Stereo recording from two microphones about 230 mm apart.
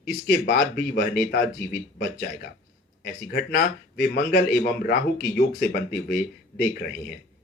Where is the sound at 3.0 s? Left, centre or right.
Left.